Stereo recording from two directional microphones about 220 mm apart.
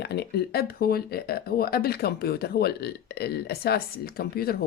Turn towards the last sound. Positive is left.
turn(degrees=45)  # may be behind; listen again after turning